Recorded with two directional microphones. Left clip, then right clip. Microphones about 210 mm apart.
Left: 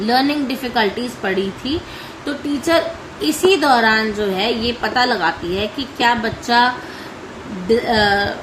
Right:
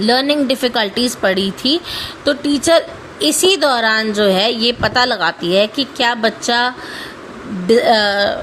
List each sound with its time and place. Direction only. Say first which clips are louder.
0.0 s a woman's voice: right 3 dB; 45° right (ahead or behind)